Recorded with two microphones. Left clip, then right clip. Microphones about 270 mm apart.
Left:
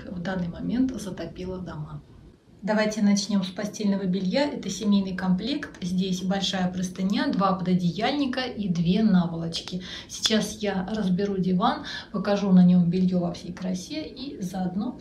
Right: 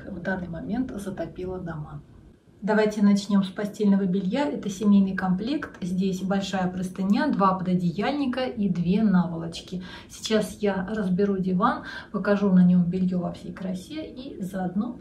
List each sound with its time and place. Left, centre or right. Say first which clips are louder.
0.2 s a woman's voice: right 1 dB; centre
2.6 s a woman's voice: right 2 dB; centre